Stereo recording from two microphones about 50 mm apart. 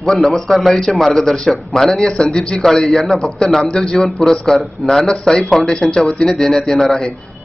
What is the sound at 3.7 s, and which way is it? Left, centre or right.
Speech, centre.